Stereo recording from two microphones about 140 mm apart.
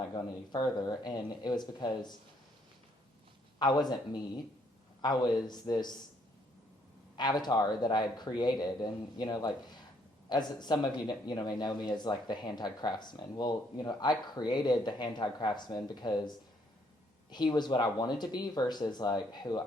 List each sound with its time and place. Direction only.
0.1 s speech: 30° left (ahead or behind)
3.6 s speech: 30° left (ahead or behind)
7.2 s speech: 30° left (ahead or behind)
17.3 s speech: 30° left (ahead or behind)